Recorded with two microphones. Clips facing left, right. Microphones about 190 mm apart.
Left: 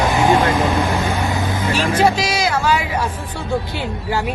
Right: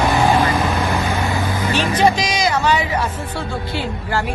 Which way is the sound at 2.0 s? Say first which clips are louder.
Right 1 dB; 5° left (ahead or behind).